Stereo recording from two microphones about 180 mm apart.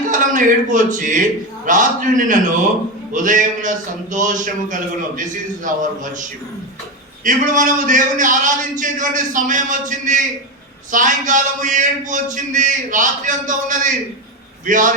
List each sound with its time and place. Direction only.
0.1 s a man's voice: 45° right (ahead or behind)
7.3 s a man's voice: 45° right (ahead or behind)